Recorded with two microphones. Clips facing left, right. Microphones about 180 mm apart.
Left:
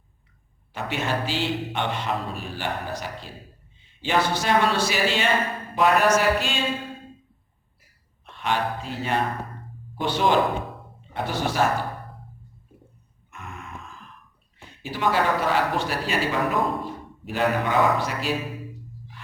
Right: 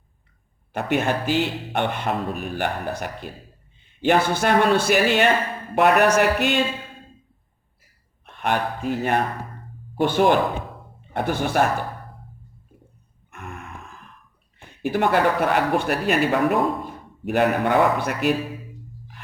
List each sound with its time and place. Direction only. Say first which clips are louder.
0.7 s speech: right 5 dB; 55° right (ahead or behind)
8.2 s speech: right 2 dB; 55° right (ahead or behind)
13.3 s a sound: right 3 dB; 55° right (ahead or behind)
14.8 s speech: right 4 dB; 55° right (ahead or behind)